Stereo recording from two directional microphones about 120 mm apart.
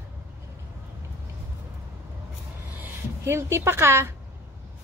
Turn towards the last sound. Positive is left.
turn(degrees=-20)  # may be behind; listen again after turning